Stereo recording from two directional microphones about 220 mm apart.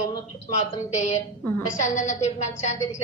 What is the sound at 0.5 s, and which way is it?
A woman's voice, 30° left (ahead or behind).